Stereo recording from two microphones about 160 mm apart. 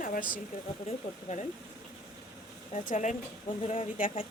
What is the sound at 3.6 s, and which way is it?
Speech, 35° left (ahead or behind).